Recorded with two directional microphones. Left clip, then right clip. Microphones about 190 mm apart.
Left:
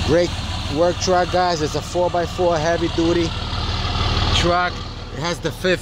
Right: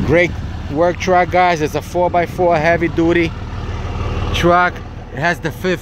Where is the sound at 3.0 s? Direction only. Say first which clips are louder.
Right 4 dB; 25° right (ahead or behind).